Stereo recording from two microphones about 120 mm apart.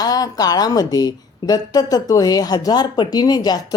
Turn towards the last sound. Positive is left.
turn(degrees=30)  # may be behind; listen again after turning